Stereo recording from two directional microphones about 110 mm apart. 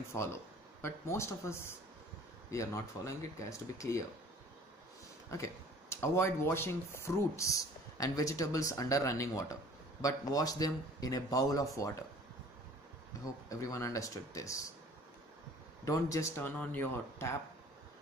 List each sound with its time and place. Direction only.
0.8 s speech: 25° left (ahead or behind)
5.3 s speech: 25° left (ahead or behind)
13.2 s speech: 30° left (ahead or behind)
15.8 s speech: 30° left (ahead or behind)